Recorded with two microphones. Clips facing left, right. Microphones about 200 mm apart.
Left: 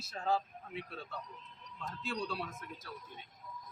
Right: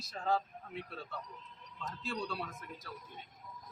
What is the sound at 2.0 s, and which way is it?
Speech, centre (ahead or behind).